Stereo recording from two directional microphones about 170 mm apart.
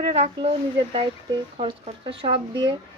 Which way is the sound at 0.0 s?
35° right (ahead or behind).